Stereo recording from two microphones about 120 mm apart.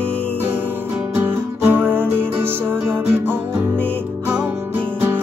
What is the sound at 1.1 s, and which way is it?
Music, 20° right (ahead or behind).